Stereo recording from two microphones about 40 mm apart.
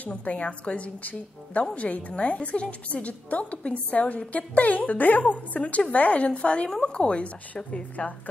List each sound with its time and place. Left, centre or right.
0.0 s a woman's voice: left